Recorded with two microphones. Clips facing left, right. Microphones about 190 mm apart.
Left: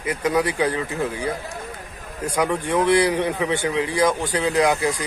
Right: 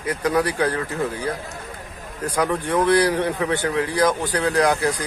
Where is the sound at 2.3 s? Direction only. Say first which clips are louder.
Even; 20° left (ahead or behind).